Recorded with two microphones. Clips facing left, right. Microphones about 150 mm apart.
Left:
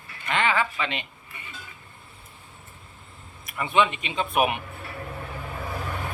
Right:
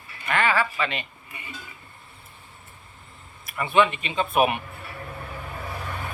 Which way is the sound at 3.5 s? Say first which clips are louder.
Right 2 dB; 20° left (ahead or behind).